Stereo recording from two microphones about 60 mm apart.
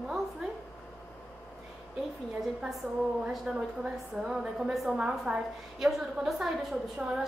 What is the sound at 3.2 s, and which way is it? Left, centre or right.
A woman's voice, centre.